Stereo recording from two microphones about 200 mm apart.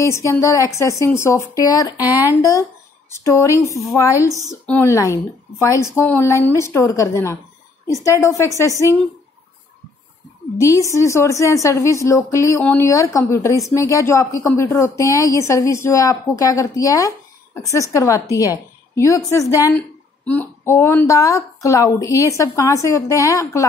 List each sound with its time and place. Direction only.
0.0 s a woman's voice: 15° left (ahead or behind)
10.6 s a woman's voice: 15° left (ahead or behind)